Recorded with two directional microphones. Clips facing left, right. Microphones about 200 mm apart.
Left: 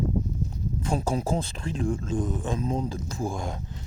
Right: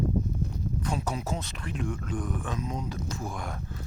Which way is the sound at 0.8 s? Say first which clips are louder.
Left 6 dB; 30° left (ahead or behind).